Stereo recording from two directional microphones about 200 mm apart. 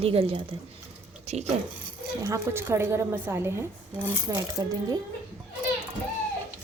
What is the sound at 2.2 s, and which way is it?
A woman's voice, 15° right (ahead or behind).